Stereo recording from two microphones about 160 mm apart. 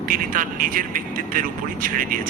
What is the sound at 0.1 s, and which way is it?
Speech, 55° right (ahead or behind).